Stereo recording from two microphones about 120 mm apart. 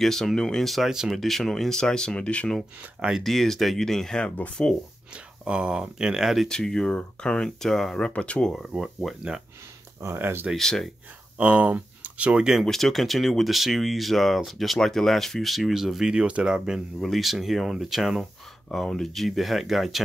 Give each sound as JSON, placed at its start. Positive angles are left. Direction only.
{"t": 0.0, "sound": "speech", "side_deg": 5}
{"t": 3.0, "sound": "speech", "side_deg": -5}
{"t": 5.1, "sound": "speech", "side_deg": -10}
{"t": 8.6, "sound": "speech", "side_deg": -5}
{"t": 10.0, "sound": "speech", "side_deg": -20}
{"t": 10.5, "sound": "speech", "side_deg": 5}
{"t": 11.3, "sound": "speech", "side_deg": -10}